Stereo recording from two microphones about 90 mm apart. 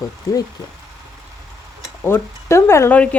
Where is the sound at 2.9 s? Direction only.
15° left (ahead or behind).